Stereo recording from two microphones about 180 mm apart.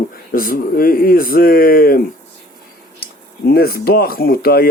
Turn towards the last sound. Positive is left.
turn(degrees=60)  # may be behind; listen again after turning